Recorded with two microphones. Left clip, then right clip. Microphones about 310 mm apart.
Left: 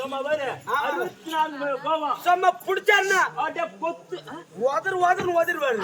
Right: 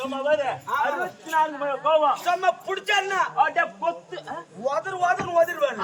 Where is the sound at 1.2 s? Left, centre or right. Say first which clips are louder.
Right 3 dB; centre.